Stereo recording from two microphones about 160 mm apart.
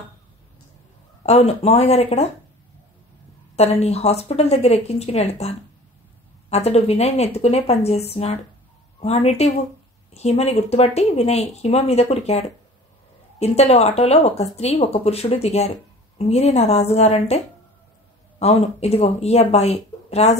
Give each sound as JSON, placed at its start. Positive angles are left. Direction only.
{"t": 1.2, "sound": "speech", "side_deg": 40}
{"t": 3.5, "sound": "speech", "side_deg": 40}
{"t": 18.4, "sound": "speech", "side_deg": 40}